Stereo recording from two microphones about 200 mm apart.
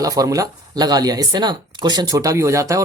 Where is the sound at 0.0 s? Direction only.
15° right (ahead or behind).